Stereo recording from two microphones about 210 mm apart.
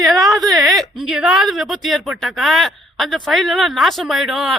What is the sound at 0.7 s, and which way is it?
A woman's voice, centre (ahead or behind).